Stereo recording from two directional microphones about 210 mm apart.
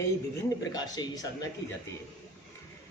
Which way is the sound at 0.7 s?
20° left (ahead or behind).